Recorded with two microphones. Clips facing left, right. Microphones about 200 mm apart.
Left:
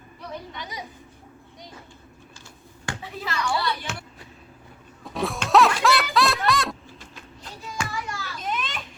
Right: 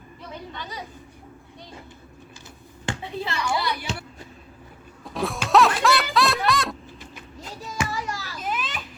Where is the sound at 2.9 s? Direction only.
25° right (ahead or behind).